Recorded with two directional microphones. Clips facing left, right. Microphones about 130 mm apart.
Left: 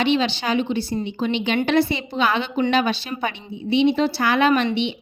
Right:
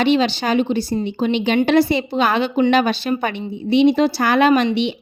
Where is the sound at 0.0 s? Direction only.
40° right (ahead or behind).